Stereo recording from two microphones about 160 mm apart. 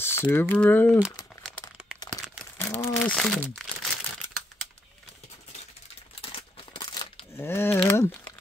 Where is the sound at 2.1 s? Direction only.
Centre (ahead or behind).